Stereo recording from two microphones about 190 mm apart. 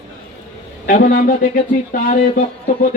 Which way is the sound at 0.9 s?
45° left (ahead or behind).